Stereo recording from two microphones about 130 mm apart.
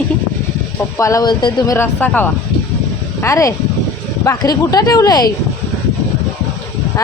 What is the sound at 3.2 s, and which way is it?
Speech, 25° left (ahead or behind).